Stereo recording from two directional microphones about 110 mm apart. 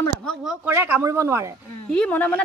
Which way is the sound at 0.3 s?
Centre (ahead or behind).